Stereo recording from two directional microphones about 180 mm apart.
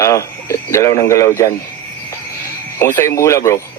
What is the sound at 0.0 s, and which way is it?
Speech, 15° left (ahead or behind).